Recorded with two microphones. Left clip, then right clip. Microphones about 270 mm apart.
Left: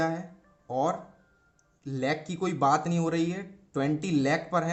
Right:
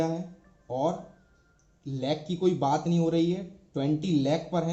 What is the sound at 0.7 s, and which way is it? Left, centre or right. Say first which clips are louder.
A man's voice: left 1 dB; left.